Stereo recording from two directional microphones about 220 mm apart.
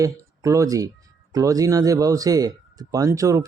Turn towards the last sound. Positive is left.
turn(degrees=-15)  # may be behind; listen again after turning